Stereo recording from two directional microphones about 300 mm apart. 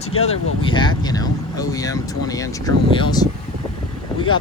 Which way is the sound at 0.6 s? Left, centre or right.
Centre.